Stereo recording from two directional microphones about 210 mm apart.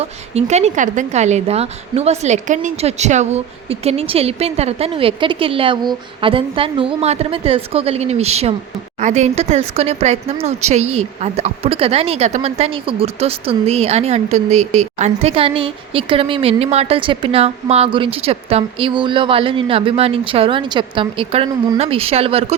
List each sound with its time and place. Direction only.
0.0 s speech: 30° right (ahead or behind)